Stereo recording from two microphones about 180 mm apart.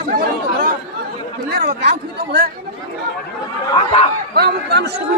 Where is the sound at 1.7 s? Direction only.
60° right (ahead or behind).